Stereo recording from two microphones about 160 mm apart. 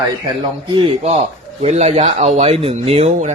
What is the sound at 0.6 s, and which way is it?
Speech, 30° right (ahead or behind).